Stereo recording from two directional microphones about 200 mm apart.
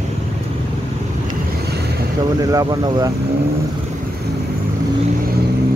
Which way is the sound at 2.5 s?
20° right (ahead or behind).